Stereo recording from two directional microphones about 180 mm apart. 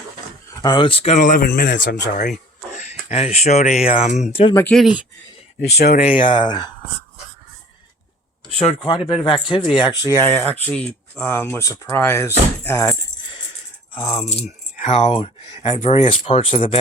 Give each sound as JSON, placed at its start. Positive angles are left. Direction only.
{"t": 0.5, "sound": "speech", "side_deg": 20}
{"t": 2.1, "sound": "speech", "side_deg": 45}
{"t": 4.7, "sound": "speech", "side_deg": -5}
{"t": 5.7, "sound": "speech", "side_deg": 60}
{"t": 6.4, "sound": "speech", "side_deg": 25}
{"t": 8.4, "sound": "speech", "side_deg": 35}
{"t": 14.3, "sound": "speech", "side_deg": 40}